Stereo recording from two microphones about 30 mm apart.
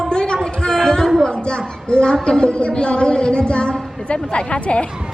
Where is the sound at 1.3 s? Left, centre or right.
Left.